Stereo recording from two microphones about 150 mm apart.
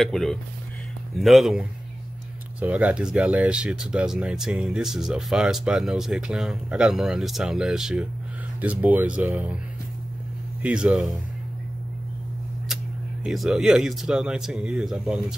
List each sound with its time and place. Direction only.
0.0 s speech: 5° left (ahead or behind)
10.6 s speech: 5° right (ahead or behind)
13.2 s speech: centre (ahead or behind)